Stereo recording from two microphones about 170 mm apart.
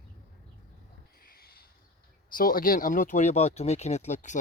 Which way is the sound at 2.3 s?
55° left (ahead or behind).